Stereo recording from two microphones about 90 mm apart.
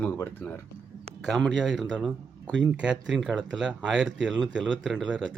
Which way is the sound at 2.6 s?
10° right (ahead or behind).